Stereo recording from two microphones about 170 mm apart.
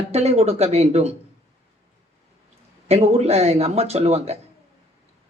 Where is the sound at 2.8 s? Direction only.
35° right (ahead or behind).